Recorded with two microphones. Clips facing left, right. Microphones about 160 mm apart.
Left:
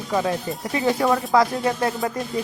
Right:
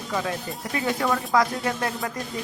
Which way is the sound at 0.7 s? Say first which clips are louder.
Left 5 dB; 30° left (ahead or behind).